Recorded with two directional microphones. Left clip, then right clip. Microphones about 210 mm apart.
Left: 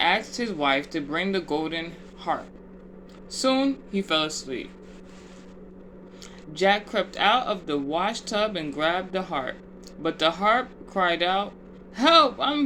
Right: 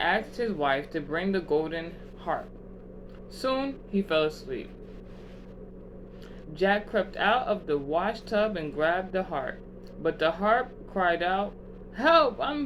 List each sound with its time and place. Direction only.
0.0 s speech: 40° left (ahead or behind)
3.4 s speech: 40° left (ahead or behind)
6.5 s speech: 40° left (ahead or behind)